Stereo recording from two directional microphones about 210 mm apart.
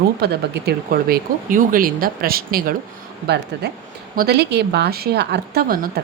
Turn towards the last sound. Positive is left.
turn(degrees=-45)  # may be behind; listen again after turning